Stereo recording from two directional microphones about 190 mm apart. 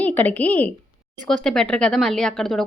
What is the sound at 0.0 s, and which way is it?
Speech, 10° left (ahead or behind).